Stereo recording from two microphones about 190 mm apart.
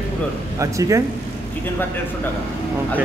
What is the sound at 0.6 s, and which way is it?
Speech, 15° right (ahead or behind).